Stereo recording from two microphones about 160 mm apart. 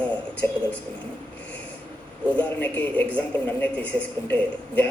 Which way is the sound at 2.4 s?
10° left (ahead or behind).